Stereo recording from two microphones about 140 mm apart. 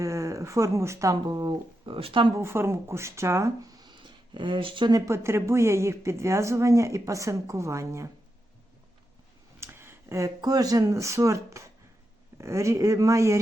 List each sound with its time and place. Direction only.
0.0 s speech: 20° right (ahead or behind)
2.0 s speech: 40° right (ahead or behind)
2.3 s speech: 20° right (ahead or behind)
9.6 s speech: 15° right (ahead or behind)